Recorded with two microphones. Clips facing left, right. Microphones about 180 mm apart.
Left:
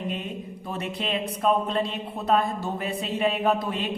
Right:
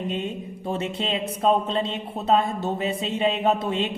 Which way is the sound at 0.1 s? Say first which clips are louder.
Right 3 dB; 25° right (ahead or behind).